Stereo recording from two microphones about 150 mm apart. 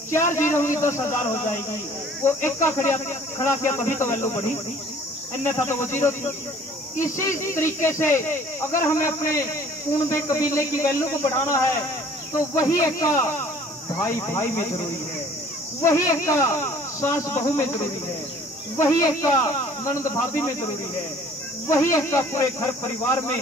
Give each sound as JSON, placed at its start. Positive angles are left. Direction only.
{"t": 0.1, "sound": "speech", "side_deg": 15}
{"t": 5.4, "sound": "speech", "side_deg": 15}
{"t": 12.8, "sound": "speech", "side_deg": 20}
{"t": 18.8, "sound": "speech", "side_deg": 20}
{"t": 21.7, "sound": "speech", "side_deg": 20}